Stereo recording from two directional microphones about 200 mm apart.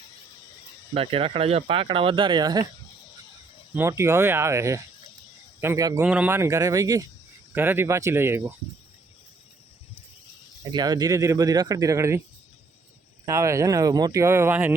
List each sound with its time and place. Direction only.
0.9 s speech: 25° right (ahead or behind)
3.8 s speech: 15° right (ahead or behind)
10.7 s speech: 20° right (ahead or behind)
13.2 s speech: 15° right (ahead or behind)